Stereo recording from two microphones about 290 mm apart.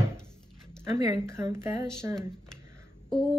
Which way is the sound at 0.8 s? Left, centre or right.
Centre.